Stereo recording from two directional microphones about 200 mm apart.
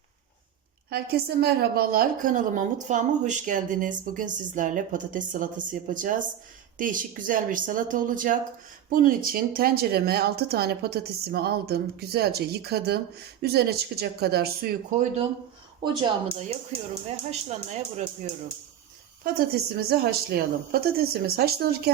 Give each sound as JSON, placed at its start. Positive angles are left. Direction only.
{"t": 0.9, "sound": "a woman's voice", "side_deg": -50}
{"t": 15.8, "sound": "speech", "side_deg": -20}
{"t": 17.1, "sound": "a woman's voice", "side_deg": -35}
{"t": 19.2, "sound": "speech", "side_deg": -50}